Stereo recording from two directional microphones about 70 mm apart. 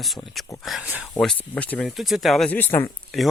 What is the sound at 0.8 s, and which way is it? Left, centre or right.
Speech, centre.